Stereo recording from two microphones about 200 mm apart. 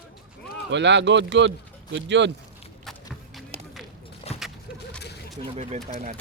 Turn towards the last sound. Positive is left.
turn(degrees=-30)  # may be behind; listen again after turning